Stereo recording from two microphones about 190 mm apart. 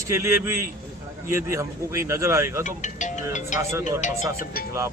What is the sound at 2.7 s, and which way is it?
Speech, 40° left (ahead or behind).